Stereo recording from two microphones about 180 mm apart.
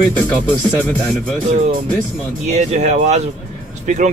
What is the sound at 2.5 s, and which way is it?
Speech, 40° right (ahead or behind).